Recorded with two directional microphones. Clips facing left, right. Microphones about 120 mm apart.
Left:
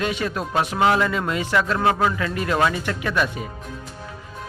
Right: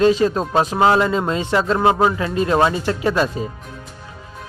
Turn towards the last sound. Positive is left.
turn(degrees=-30)  # may be behind; listen again after turning